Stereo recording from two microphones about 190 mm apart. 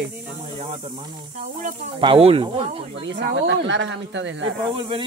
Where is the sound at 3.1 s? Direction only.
70° right (ahead or behind).